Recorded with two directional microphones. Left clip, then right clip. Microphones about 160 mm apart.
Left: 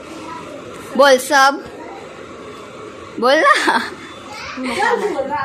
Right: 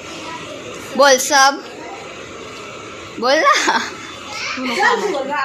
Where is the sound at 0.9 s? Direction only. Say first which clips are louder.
Left 1 dB; 30° left (ahead or behind).